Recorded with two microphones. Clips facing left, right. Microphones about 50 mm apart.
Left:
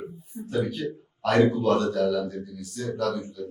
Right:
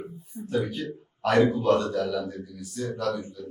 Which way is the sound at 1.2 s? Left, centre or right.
Centre.